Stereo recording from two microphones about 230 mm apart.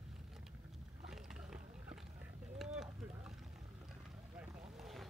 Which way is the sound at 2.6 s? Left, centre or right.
Centre.